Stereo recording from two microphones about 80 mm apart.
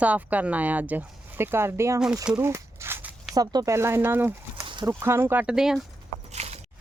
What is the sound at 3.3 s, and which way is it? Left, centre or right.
Speech, right.